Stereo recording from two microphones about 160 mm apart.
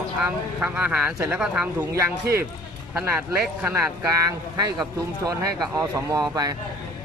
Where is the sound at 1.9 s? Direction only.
20° right (ahead or behind).